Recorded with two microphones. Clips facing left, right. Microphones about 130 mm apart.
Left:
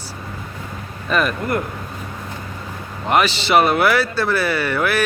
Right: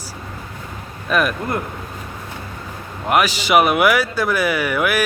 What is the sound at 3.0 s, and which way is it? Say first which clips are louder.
Speech: even; 10° right (ahead or behind).